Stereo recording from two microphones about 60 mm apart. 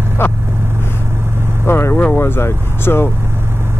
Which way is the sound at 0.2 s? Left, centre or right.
Left.